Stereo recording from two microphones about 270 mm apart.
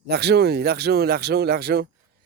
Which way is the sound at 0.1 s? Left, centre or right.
Right.